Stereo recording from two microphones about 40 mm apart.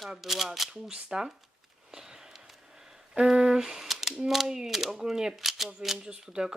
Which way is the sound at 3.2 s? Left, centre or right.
Centre.